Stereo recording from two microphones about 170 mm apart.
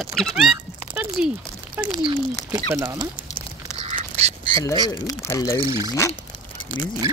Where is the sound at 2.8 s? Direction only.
25° right (ahead or behind).